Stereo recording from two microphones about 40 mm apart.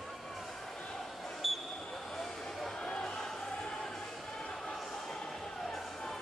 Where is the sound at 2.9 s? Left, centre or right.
Left.